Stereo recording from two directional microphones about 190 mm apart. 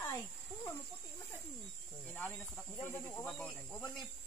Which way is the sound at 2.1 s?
5° left (ahead or behind).